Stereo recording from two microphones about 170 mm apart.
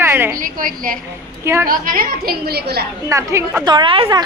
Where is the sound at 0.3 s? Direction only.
55° right (ahead or behind).